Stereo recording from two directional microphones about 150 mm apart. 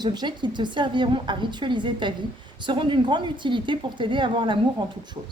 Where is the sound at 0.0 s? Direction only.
30° right (ahead or behind).